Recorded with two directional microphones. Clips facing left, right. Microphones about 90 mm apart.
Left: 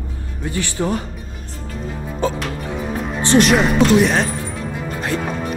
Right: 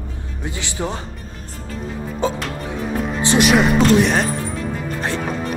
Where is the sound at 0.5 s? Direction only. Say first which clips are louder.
Left 5 dB; 20° right (ahead or behind).